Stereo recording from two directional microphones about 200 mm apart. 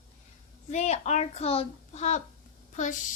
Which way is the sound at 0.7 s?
35° left (ahead or behind).